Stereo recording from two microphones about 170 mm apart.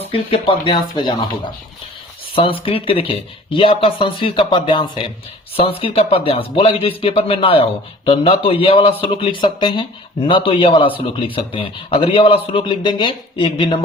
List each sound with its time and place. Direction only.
0.4 s speech: 30° left (ahead or behind)
2.3 s speech: 30° left (ahead or behind)